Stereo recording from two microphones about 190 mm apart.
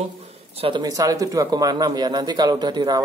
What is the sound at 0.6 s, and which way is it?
Speech, 20° right (ahead or behind).